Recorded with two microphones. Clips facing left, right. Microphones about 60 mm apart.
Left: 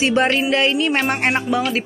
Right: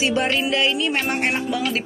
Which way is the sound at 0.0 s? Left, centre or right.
Left.